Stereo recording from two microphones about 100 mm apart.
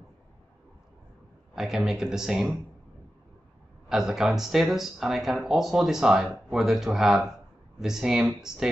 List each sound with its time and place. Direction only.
1.5 s speech: 5° right (ahead or behind)
3.9 s speech: 5° right (ahead or behind)